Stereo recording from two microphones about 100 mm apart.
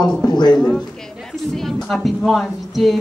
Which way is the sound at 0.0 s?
45° left (ahead or behind).